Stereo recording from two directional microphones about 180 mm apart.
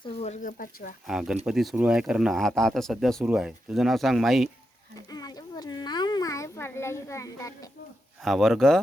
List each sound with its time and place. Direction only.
0.0 s speech: 35° left (ahead or behind); by 0.9 s 50° left (ahead or behind)
1.0 s speech: centre (ahead or behind)
5.1 s a sound: 20° left (ahead or behind)
8.2 s speech: centre (ahead or behind)